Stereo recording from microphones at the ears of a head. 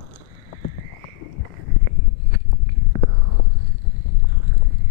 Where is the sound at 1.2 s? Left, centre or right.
Left.